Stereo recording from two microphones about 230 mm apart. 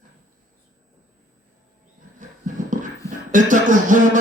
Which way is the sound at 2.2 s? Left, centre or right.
Right.